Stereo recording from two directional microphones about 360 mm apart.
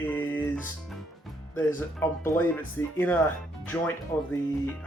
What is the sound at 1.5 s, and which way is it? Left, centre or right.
Speech, centre.